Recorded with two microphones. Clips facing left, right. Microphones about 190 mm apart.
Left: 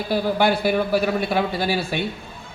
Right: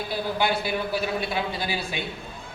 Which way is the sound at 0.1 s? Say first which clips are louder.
Left 7 dB; 55° left (ahead or behind).